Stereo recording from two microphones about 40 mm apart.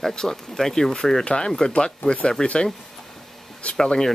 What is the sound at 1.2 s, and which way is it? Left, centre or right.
Speech, left.